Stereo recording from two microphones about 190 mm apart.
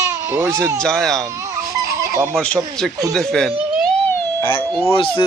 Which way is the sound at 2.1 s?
15° right (ahead or behind).